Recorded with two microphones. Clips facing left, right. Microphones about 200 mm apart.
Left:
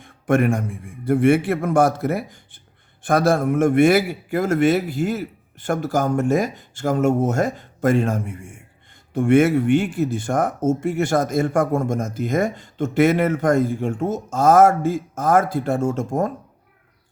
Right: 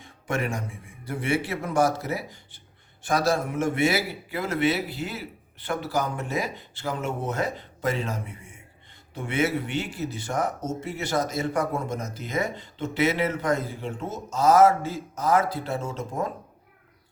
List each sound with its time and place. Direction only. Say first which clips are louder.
0.0 s speech: left 10 dB; 55° left (ahead or behind)